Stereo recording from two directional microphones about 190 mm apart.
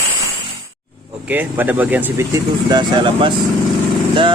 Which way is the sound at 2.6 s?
25° right (ahead or behind).